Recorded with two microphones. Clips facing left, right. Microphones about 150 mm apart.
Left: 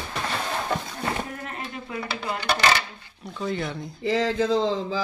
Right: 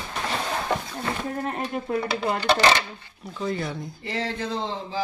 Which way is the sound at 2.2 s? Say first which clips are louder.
Right 2 dB; 25° right (ahead or behind).